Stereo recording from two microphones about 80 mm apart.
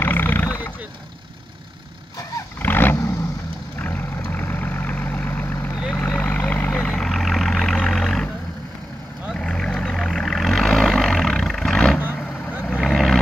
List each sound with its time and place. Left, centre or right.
0.0 s roaring cats: left
2.6 s vehicle: left
3.8 s vehicle: left
7.0 s vehicle: centre
9.3 s vehicle: centre